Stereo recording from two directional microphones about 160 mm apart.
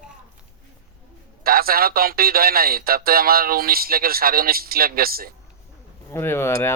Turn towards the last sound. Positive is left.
turn(degrees=15)  # may be behind; listen again after turning